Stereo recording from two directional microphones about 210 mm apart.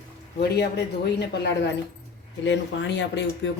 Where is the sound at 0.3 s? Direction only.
50° left (ahead or behind).